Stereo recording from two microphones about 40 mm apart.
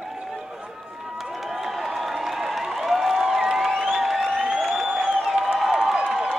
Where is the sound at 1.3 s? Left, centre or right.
Centre.